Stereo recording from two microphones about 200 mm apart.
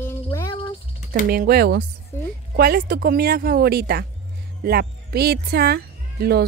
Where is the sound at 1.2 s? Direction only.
50° right (ahead or behind).